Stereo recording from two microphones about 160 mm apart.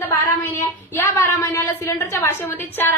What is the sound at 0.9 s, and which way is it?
A woman's voice, 15° left (ahead or behind).